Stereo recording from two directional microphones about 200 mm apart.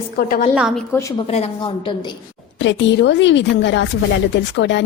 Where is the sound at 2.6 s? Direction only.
65° left (ahead or behind).